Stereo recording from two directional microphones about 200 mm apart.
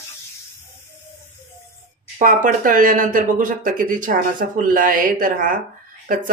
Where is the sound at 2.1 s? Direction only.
40° right (ahead or behind).